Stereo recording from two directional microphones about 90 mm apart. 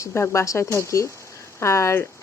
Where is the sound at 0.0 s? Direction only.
30° left (ahead or behind).